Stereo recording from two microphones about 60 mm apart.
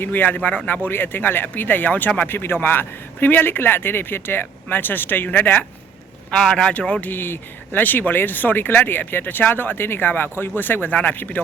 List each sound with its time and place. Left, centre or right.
0.0 s speech: left
6.3 s speech: centre
7.1 s speech: left